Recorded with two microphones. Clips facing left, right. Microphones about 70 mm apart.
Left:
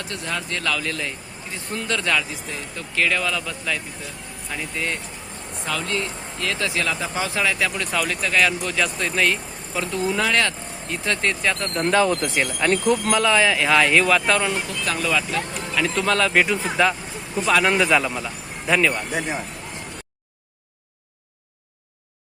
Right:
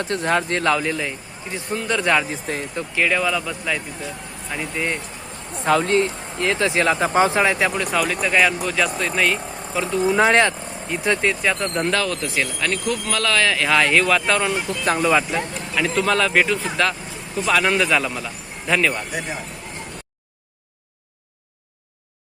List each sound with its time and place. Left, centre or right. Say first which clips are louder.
0.0 s speech: right 8 dB; right
0.9 s speech: right 4 dB; centre
2.3 s speech: right 5 dB; right
2.9 s speech: right 2 dB; centre
5.6 s speech: right 9 dB; right
6.8 s speech: right 8 dB; right
7.8 s speech: right 3 dB; centre
10.2 s speech: right 6 dB; right
10.8 s speech: right 3 dB; centre
11.9 s speech: left 3 dB; left; by 14.8 s centre
14.8 s speech: right 6 dB; right
15.4 s speech: right 1 dB; centre